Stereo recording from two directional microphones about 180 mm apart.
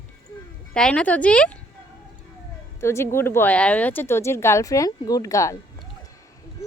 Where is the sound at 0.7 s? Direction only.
5° left (ahead or behind).